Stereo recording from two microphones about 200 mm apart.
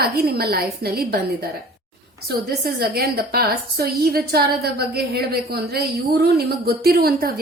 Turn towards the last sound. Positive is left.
turn(degrees=-50)  # may be behind; listen again after turning